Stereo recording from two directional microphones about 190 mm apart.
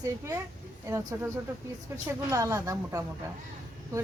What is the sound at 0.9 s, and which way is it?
A woman's voice, 15° right (ahead or behind).